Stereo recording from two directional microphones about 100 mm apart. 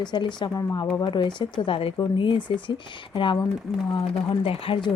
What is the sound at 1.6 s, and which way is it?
Speech, 65° left (ahead or behind).